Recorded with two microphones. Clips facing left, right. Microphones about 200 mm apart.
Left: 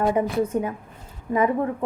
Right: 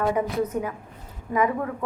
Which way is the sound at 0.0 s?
30° left (ahead or behind).